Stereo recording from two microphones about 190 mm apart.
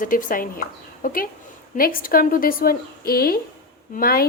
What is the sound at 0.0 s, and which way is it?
Speech, 45° left (ahead or behind).